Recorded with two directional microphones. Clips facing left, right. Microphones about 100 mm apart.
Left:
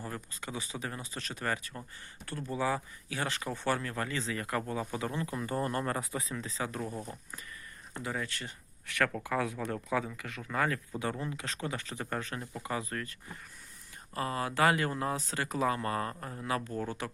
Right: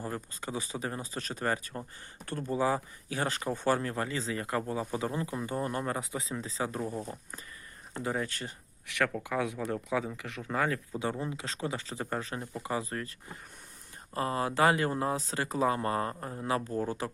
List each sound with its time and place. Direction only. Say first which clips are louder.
0.4 s speech: right 3 dB; 35° right (ahead or behind)
5.4 s speech: left 3 dB; 10° right (ahead or behind)
6.0 s speech: right 1 dB; 25° right (ahead or behind)
6.8 s speech: right 3 dB; 15° right (ahead or behind)
8.0 s speech: right 4 dB; 30° right (ahead or behind)
9.0 s speech: right 1 dB; 5° right (ahead or behind)
10.1 s speech: right 3 dB; 25° right (ahead or behind)